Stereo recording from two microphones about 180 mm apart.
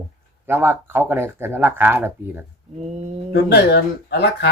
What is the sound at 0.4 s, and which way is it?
Speech, 10° right (ahead or behind).